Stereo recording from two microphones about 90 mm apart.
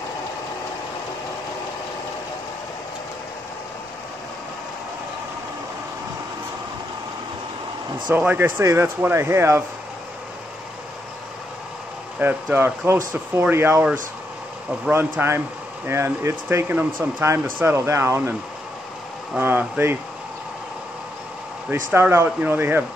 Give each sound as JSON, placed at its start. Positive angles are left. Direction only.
{"t": 8.4, "sound": "speech", "side_deg": -25}
{"t": 12.2, "sound": "speech", "side_deg": -20}
{"t": 14.9, "sound": "speech", "side_deg": -20}
{"t": 19.3, "sound": "speech", "side_deg": -20}
{"t": 21.6, "sound": "speech", "side_deg": -25}